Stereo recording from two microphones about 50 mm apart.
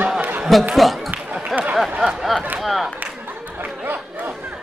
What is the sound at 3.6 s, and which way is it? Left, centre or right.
Chatter, right.